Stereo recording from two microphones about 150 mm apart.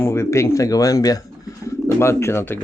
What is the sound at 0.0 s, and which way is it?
Speech, 15° left (ahead or behind).